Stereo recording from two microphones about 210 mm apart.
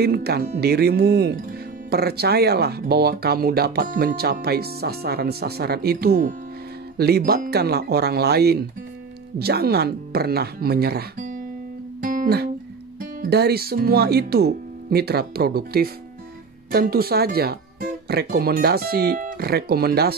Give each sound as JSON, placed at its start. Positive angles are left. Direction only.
{"t": 0.0, "sound": "speech", "side_deg": -50}
{"t": 12.0, "sound": "music", "side_deg": -40}
{"t": 13.2, "sound": "speech", "side_deg": -50}